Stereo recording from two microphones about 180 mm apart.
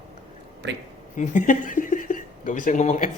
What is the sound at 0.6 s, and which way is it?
Speech, 75° right (ahead or behind).